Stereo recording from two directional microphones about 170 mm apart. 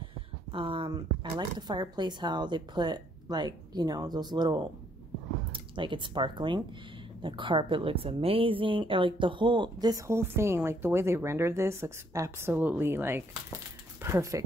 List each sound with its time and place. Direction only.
0.5 s speech: 30° right (ahead or behind)